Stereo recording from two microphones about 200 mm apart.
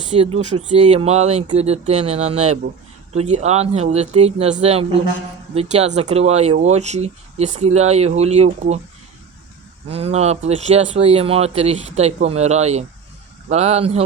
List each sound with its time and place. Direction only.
0.1 s speech: 30° right (ahead or behind)
9.9 s speech: 30° right (ahead or behind)